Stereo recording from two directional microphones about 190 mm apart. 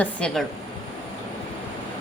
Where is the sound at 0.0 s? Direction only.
5° left (ahead or behind).